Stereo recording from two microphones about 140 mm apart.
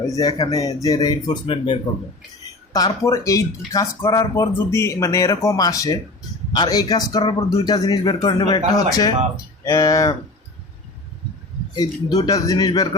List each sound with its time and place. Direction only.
0.1 s speech: 25° left (ahead or behind)
2.7 s speech: 25° left (ahead or behind)
12.1 s speech: 25° left (ahead or behind)